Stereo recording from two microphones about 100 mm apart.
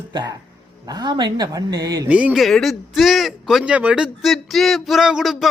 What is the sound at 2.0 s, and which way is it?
Speech, 15° right (ahead or behind).